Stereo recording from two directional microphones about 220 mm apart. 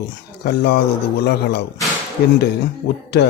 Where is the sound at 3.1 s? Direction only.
50° left (ahead or behind).